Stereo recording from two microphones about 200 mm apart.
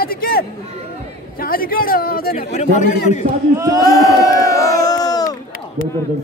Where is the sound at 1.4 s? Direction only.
45° left (ahead or behind).